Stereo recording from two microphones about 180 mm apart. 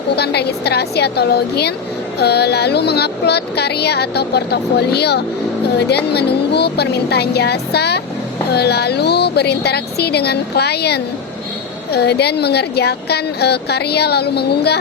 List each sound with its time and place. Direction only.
0.2 s speech: 65° left (ahead or behind)